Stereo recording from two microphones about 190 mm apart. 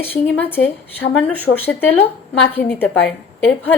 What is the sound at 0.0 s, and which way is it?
A woman's voice, 10° left (ahead or behind).